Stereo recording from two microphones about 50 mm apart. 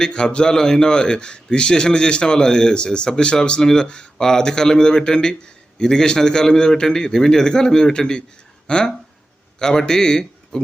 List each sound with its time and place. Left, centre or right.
0.0 s a man's voice: centre